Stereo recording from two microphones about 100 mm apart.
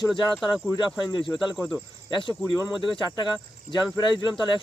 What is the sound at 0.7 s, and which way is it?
Speech, 45° left (ahead or behind).